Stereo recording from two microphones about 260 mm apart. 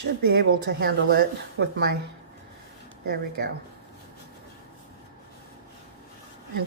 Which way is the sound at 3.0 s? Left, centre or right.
Right.